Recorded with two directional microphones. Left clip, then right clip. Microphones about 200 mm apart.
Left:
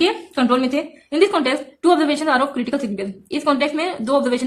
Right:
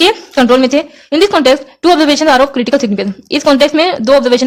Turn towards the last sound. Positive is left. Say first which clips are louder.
# right 10 dB
turn(degrees=-45)  # may be behind; listen again after turning